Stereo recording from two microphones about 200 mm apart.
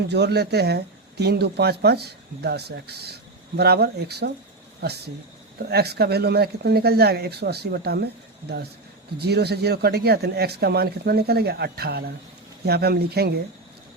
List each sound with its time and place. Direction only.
0.1 s speech: 55° right (ahead or behind)
5.6 s speech: 55° right (ahead or behind)